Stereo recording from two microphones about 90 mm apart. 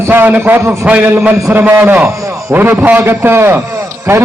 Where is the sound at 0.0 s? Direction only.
25° right (ahead or behind).